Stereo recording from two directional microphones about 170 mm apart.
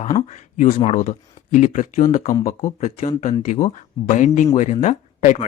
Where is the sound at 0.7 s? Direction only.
40° left (ahead or behind).